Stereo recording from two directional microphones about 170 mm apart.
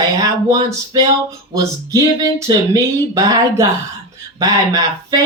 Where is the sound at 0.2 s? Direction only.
20° right (ahead or behind).